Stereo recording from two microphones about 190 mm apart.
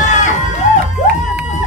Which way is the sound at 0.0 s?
40° left (ahead or behind).